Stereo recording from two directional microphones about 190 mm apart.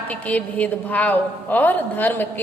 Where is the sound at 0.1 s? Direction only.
5° left (ahead or behind).